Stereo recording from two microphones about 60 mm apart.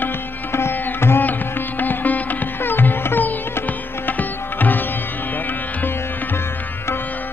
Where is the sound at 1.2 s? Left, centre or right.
Left.